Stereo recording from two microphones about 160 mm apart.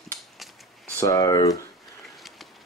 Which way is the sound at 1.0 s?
25° left (ahead or behind).